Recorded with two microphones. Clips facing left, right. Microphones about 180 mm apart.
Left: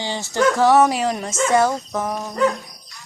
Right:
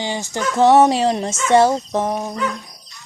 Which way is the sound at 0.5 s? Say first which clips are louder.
Right 6 dB; 25° right (ahead or behind).